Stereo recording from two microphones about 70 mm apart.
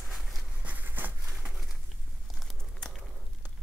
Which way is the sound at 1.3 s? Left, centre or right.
Centre.